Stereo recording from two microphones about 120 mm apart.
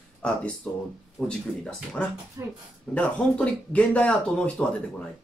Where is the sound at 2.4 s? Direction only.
25° right (ahead or behind).